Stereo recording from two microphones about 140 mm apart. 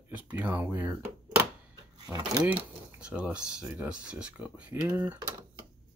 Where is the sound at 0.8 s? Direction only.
20° right (ahead or behind).